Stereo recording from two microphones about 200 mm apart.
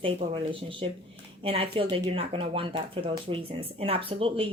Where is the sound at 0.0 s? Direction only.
25° right (ahead or behind).